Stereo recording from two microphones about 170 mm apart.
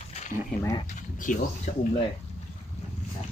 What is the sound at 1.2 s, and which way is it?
Speech, 50° left (ahead or behind).